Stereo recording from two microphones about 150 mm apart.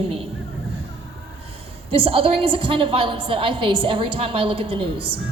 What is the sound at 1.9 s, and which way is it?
A woman's voice, 40° right (ahead or behind).